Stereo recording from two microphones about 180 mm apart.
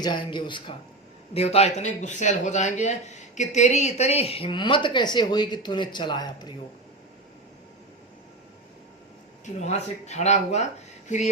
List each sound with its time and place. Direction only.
0.0 s speech: 25° left (ahead or behind)
9.6 s speech: 40° left (ahead or behind)